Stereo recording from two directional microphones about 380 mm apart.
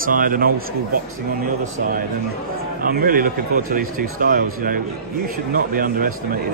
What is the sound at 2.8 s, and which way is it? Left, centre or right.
A man's voice, right.